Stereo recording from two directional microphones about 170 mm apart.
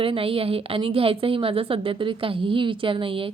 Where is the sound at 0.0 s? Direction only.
30° right (ahead or behind).